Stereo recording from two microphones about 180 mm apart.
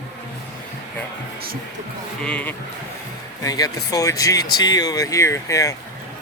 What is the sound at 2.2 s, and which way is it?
Speech, 5° left (ahead or behind).